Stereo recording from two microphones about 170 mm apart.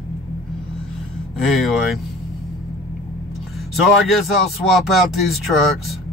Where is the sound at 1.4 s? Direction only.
Centre (ahead or behind).